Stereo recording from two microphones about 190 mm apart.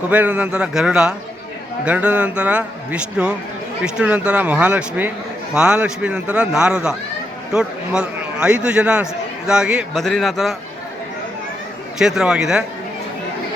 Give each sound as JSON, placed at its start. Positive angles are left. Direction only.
{"t": 0.1, "sound": "a man's voice", "side_deg": -10}
{"t": 11.9, "sound": "a man's voice", "side_deg": -5}